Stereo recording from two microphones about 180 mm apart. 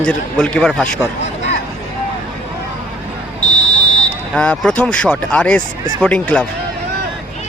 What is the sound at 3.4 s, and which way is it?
Buzzer, 20° right (ahead or behind).